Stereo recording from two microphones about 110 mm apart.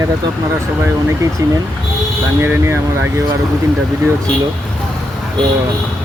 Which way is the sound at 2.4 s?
20° right (ahead or behind).